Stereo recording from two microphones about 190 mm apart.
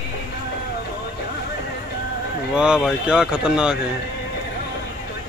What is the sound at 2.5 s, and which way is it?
Speech, 5° right (ahead or behind).